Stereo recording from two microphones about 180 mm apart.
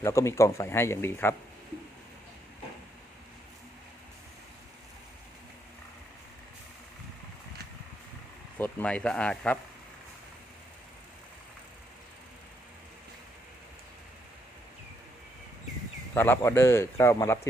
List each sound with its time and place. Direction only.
0.0 s speech: 15° left (ahead or behind)
8.5 s speech: 10° left (ahead or behind)
16.1 s speech: 10° left (ahead or behind)